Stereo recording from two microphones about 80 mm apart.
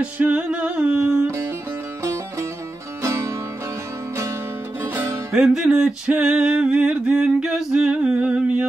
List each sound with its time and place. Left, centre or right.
0.0 s music: centre
1.2 s music: right
3.0 s music: right
4.8 s music: right
5.3 s music: centre